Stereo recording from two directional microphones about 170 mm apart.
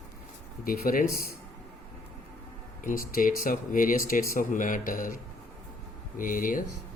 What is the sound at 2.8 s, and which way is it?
A man's voice, 55° left (ahead or behind).